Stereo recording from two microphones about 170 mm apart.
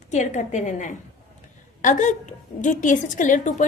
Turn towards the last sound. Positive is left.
turn(degrees=50)  # may be behind; listen again after turning